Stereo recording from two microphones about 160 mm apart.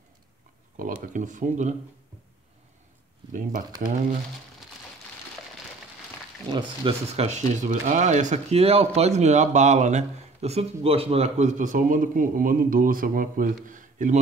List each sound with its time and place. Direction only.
0.7 s speech: 55° right (ahead or behind)
6.5 s speech: 30° right (ahead or behind); by 14.1 s 55° right (ahead or behind)